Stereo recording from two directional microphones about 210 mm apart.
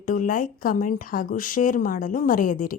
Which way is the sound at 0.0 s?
40° left (ahead or behind).